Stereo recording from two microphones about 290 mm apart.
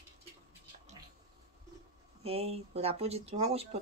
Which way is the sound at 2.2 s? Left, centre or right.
Right.